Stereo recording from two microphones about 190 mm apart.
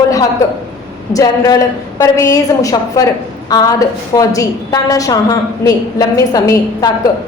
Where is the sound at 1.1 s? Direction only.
20° left (ahead or behind).